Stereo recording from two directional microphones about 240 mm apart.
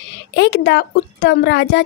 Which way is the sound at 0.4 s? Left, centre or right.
Left.